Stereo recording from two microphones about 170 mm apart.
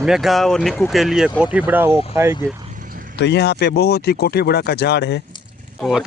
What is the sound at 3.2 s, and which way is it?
Speech, 85° left.